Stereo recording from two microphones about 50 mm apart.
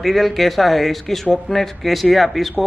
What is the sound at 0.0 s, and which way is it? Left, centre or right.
A man's voice, centre.